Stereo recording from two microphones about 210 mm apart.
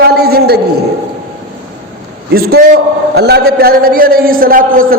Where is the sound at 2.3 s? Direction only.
45° right (ahead or behind).